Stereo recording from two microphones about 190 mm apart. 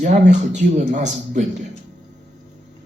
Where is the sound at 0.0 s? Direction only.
40° right (ahead or behind).